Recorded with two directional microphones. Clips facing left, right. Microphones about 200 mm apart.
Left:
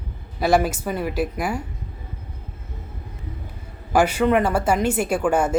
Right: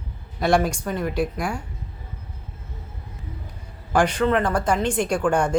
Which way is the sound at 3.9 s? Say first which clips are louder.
Left 2 dB; 10° left (ahead or behind).